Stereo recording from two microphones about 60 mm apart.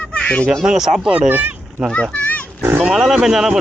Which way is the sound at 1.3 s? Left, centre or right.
Right.